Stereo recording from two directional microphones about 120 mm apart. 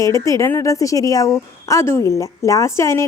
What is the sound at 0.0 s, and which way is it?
A woman's voice, 25° left (ahead or behind).